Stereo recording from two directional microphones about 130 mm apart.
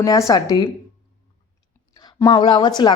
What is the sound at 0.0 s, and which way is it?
Speech, 25° left (ahead or behind).